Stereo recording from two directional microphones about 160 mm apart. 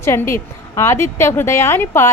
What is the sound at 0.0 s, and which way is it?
A woman's voice, 15° left (ahead or behind).